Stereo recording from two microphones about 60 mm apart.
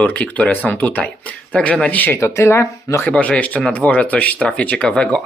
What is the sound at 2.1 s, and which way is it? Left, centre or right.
Speech, left.